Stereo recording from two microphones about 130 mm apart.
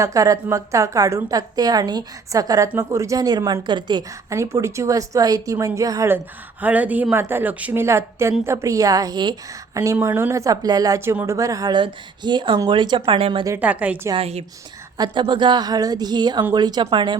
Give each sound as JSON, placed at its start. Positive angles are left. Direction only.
{"t": 0.0, "sound": "a woman's voice", "side_deg": -25}
{"t": 4.3, "sound": "a woman's voice", "side_deg": -20}
{"t": 6.6, "sound": "a woman's voice", "side_deg": -10}
{"t": 13.1, "sound": "a woman's voice", "side_deg": -50}
{"t": 13.6, "sound": "a woman's voice", "side_deg": -10}
{"t": 14.2, "sound": "a woman's voice", "side_deg": -55}
{"t": 14.9, "sound": "a woman's voice", "side_deg": -35}